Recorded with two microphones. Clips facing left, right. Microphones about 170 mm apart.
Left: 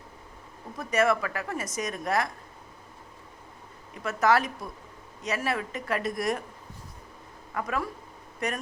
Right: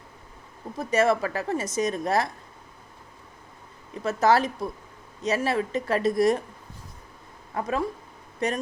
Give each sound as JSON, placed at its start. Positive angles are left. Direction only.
{"t": 0.8, "sound": "a woman's voice", "side_deg": -25}
{"t": 4.0, "sound": "a woman's voice", "side_deg": -30}
{"t": 7.5, "sound": "a woman's voice", "side_deg": -30}